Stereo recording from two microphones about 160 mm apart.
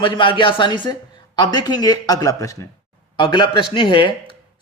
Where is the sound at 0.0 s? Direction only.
30° left (ahead or behind).